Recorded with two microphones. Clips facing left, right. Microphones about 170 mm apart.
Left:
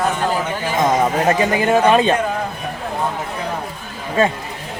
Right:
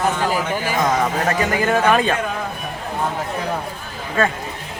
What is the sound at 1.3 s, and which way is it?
Speech, 20° left (ahead or behind).